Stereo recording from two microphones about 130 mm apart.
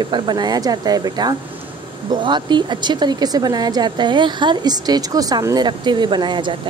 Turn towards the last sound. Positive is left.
turn(degrees=-35)  # may be behind; listen again after turning